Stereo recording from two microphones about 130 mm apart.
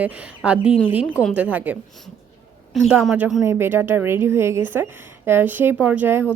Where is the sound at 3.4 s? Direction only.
20° right (ahead or behind).